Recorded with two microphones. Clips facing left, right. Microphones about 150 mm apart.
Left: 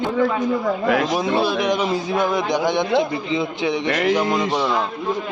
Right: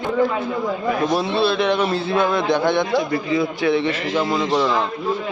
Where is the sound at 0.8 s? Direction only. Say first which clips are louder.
Left 1 dB; 80° left.